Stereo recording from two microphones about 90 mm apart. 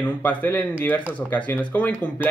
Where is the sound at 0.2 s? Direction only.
20° left (ahead or behind).